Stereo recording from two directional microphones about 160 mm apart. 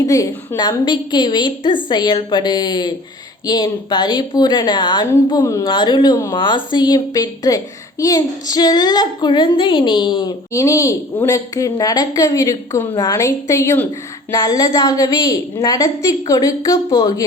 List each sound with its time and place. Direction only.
0.0 s a woman's voice: 20° left (ahead or behind)